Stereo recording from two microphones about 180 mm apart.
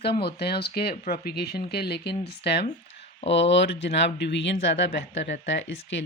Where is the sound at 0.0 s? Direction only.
65° left (ahead or behind).